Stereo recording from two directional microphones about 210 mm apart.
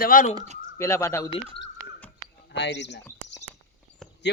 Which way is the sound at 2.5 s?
55° left (ahead or behind).